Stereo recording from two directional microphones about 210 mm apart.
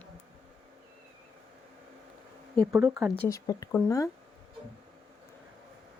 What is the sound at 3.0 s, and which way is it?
Speech, 10° left (ahead or behind).